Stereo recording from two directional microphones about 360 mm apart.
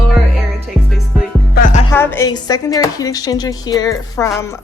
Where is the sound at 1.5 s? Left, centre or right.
Left.